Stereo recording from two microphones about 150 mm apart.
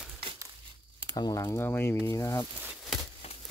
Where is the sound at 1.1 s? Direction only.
30° left (ahead or behind).